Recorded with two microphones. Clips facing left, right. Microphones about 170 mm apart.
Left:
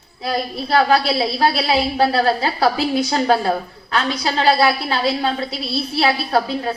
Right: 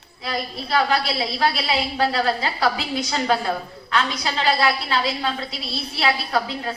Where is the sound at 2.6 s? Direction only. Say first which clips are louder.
Left 6 dB; 60° left (ahead or behind).